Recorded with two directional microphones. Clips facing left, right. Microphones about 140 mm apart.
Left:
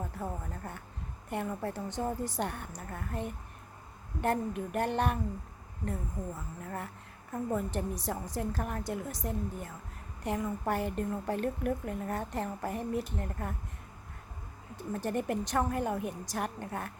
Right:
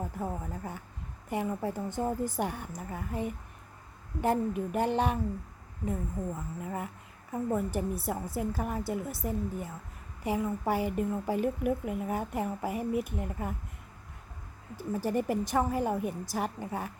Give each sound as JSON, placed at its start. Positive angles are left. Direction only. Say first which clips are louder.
{"t": 0.0, "sound": "a woman's voice", "louder": "right 3 dB", "side_deg": -10}
{"t": 14.8, "sound": "a woman's voice", "louder": "right 3 dB", "side_deg": -10}